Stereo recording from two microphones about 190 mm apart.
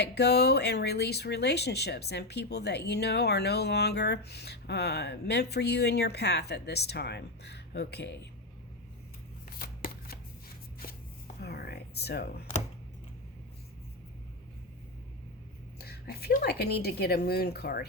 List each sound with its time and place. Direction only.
0.0 s speech: 60° left (ahead or behind)
9.6 s shuffling cards: 50° left (ahead or behind)
11.3 s a sound: 55° left (ahead or behind)
15.8 s speech: 55° left (ahead or behind)